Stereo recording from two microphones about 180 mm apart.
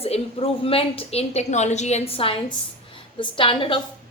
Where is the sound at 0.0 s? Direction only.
35° left (ahead or behind).